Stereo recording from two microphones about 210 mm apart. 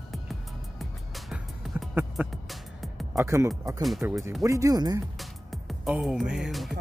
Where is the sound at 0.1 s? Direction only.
Centre (ahead or behind).